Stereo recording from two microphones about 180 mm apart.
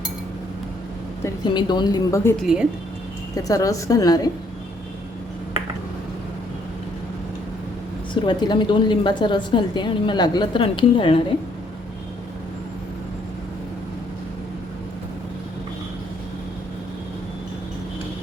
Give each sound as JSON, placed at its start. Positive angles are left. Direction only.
{"t": 1.2, "sound": "a woman's voice", "side_deg": 25}
{"t": 3.3, "sound": "a woman's voice", "side_deg": 20}
{"t": 8.1, "sound": "a woman's voice", "side_deg": 25}